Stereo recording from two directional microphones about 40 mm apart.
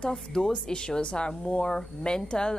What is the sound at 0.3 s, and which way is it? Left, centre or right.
A woman's voice, centre.